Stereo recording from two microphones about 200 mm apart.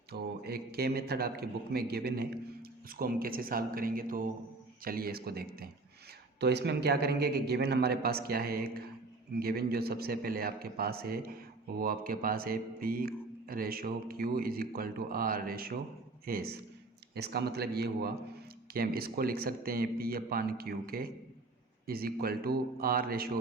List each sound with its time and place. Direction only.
0.1 s a man's voice: 50° right (ahead or behind)